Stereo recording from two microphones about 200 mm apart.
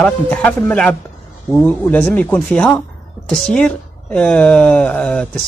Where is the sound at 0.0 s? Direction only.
10° left (ahead or behind).